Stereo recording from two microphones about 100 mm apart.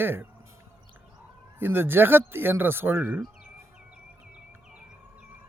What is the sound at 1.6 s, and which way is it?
Speech, 20° right (ahead or behind).